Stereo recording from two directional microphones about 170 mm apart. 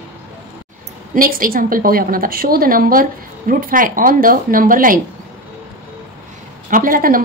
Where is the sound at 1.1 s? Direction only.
55° right (ahead or behind).